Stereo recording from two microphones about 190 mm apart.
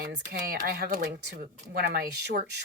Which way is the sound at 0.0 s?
55° right (ahead or behind).